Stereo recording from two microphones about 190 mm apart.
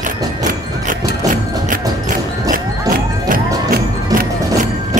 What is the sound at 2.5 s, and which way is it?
Music, 45° right (ahead or behind).